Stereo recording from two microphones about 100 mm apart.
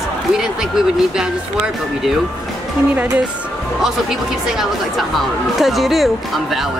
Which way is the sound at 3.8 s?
5° right (ahead or behind).